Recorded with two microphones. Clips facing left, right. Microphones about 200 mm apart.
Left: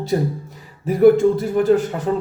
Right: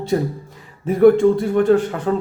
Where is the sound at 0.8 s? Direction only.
5° left (ahead or behind).